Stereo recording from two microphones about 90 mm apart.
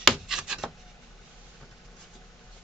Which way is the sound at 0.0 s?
5° right (ahead or behind).